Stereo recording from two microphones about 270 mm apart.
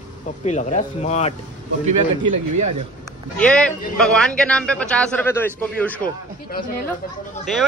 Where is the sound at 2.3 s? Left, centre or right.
Right.